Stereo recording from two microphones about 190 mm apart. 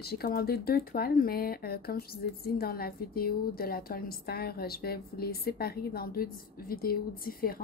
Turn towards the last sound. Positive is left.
turn(degrees=50)  # may be behind; listen again after turning